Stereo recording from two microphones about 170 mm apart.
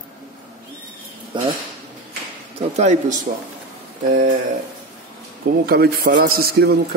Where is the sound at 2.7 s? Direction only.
40° right (ahead or behind).